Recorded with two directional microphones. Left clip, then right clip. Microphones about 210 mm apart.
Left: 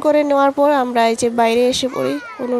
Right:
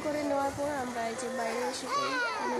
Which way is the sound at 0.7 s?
40° left (ahead or behind).